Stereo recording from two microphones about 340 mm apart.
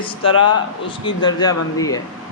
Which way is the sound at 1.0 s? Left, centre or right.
Centre.